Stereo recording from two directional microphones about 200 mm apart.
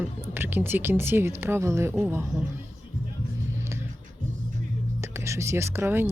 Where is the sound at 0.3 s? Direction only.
10° right (ahead or behind).